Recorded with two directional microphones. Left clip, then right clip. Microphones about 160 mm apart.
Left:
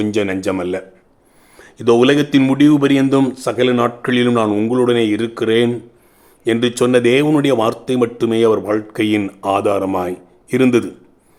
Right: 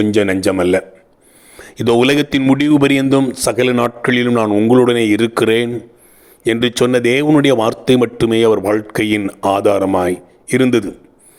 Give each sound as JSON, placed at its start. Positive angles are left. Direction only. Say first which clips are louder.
{"t": 0.0, "sound": "speech", "louder": "right 4 dB", "side_deg": -25}
{"t": 4.4, "sound": "a man's voice", "louder": "right 3 dB", "side_deg": -15}
{"t": 4.7, "sound": "speech", "louder": "right 5 dB", "side_deg": -40}